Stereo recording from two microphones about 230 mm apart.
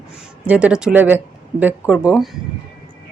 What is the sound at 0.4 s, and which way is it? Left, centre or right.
Speech, centre.